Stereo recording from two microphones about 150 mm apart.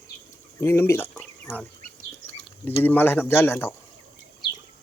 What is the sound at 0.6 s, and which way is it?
Speech, 15° left (ahead or behind).